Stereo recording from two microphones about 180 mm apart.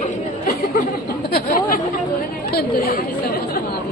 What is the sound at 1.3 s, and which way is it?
Chatter, 55° left (ahead or behind).